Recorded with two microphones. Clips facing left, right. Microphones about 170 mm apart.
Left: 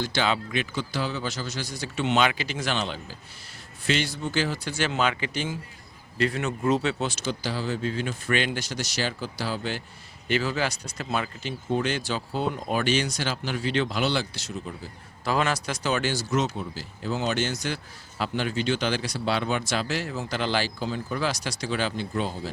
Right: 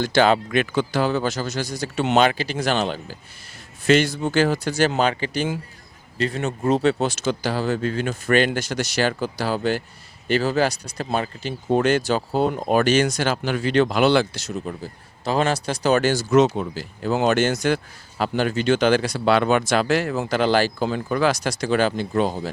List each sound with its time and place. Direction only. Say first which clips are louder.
0.0 s speech: right 8 dB; 50° right (ahead or behind)
7.3 s speech: right 7 dB; 50° right (ahead or behind)
10.2 s speech: right 6 dB; 40° right (ahead or behind)
11.7 s speech: right 8 dB; 50° right (ahead or behind)
15.2 s speech: right 4 dB; 25° right (ahead or behind); by 16.2 s 45° right (ahead or behind)
16.3 s speech: right 12 dB; 75° right (ahead or behind)
21.4 s speech: right 8 dB; 50° right (ahead or behind)